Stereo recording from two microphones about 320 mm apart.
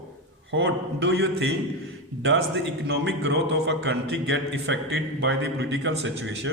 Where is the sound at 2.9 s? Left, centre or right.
Right.